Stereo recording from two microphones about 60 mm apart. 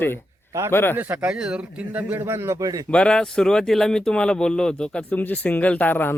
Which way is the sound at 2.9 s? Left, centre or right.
Centre.